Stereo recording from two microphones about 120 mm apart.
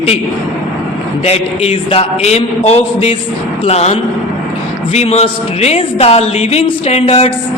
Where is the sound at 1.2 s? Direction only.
60° left (ahead or behind).